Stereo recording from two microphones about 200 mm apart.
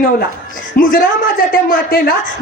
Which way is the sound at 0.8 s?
45° left (ahead or behind).